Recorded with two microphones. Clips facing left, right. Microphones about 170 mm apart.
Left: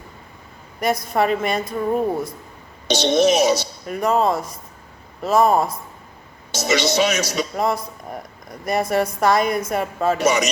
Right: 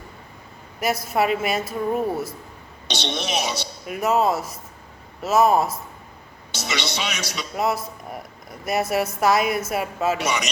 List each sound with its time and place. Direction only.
0.8 s a woman's voice: 5° right (ahead or behind)
2.8 s a man's voice: 45° left (ahead or behind)
3.8 s a woman's voice: 5° right (ahead or behind)
6.5 s a man's voice: 45° left (ahead or behind)
7.5 s a woman's voice: 5° right (ahead or behind)
10.2 s a man's voice: 45° left (ahead or behind)